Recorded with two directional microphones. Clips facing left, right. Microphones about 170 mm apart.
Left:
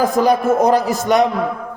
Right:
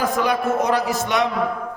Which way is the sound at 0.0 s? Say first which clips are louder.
Left 6 dB; 35° left (ahead or behind).